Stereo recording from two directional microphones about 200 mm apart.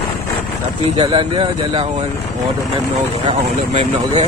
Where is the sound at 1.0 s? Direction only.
25° right (ahead or behind).